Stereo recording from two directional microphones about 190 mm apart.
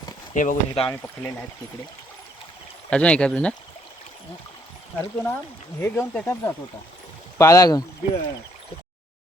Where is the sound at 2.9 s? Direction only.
5° left (ahead or behind).